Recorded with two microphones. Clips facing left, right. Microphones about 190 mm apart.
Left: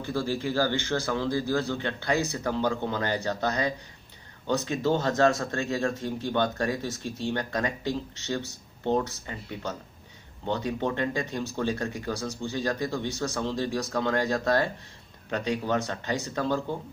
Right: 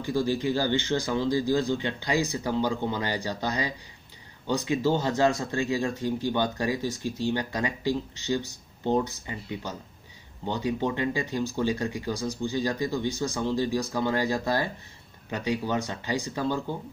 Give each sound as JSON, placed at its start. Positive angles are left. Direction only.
{"t": 0.0, "sound": "speech", "side_deg": -15}